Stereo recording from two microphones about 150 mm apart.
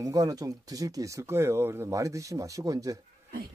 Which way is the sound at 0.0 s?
25° right (ahead or behind).